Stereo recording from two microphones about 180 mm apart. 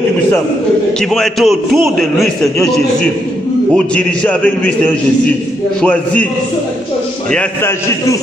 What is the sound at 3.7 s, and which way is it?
Speech, 5° left (ahead or behind).